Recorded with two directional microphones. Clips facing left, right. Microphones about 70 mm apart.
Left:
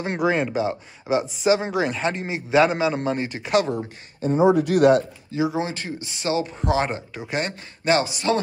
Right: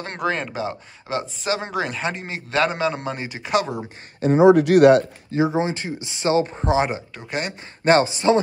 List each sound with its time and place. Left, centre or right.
0.0 s speech: centre
4.2 s speech: right
5.4 s speech: right
6.3 s speech: right
7.2 s speech: centre
7.8 s speech: right